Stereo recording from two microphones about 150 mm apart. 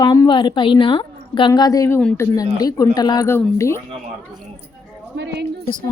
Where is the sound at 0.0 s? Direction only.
25° left (ahead or behind).